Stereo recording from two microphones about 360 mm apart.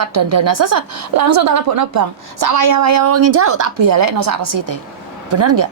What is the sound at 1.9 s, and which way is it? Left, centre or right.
A woman's voice, right.